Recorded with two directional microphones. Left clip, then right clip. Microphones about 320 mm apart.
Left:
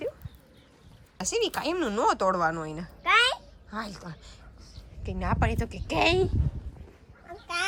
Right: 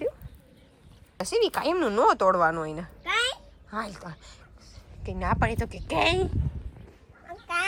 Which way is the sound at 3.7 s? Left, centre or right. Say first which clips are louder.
Right 3 dB; centre.